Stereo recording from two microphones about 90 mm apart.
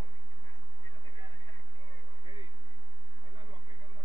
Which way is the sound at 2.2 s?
55° right (ahead or behind).